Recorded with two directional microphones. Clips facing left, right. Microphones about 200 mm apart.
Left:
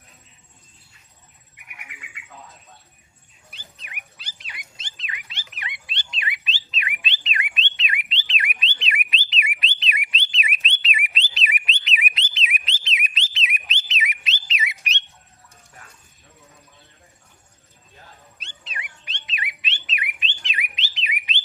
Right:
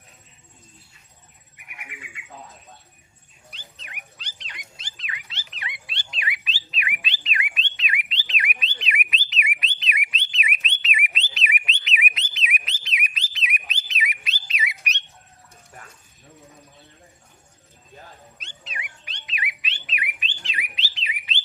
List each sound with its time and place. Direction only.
4.2 s dog: 10° left (ahead or behind)
4.8 s dog: 25° left (ahead or behind)
5.3 s a sound: 15° left (ahead or behind)
6.1 s squawk: 25° left (ahead or behind)
6.7 s bird: 25° left (ahead or behind)
18.3 s dog: 30° left (ahead or behind)
19.3 s bird: 25° left (ahead or behind)